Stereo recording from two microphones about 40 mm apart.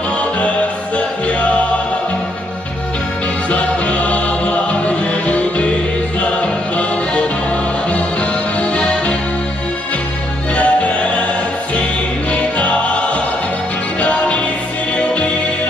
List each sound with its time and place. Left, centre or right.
0.9 s music: left
3.4 s music: left
10.5 s music: left
12.3 s music: left